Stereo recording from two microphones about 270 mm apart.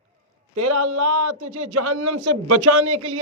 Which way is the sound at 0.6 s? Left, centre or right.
Right.